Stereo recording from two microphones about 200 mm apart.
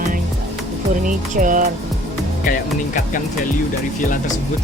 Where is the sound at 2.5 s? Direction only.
40° left (ahead or behind).